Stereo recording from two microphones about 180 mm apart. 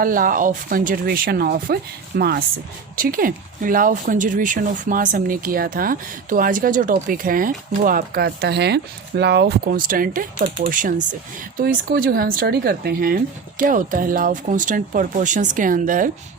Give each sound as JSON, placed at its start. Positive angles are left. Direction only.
{"t": 0.0, "sound": "speech", "side_deg": -50}